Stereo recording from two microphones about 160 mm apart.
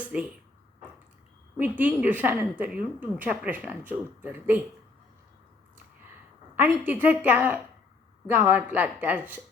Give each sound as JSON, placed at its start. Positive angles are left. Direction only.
{"t": 1.5, "sound": "a woman's voice", "side_deg": -10}
{"t": 6.6, "sound": "a woman's voice", "side_deg": -10}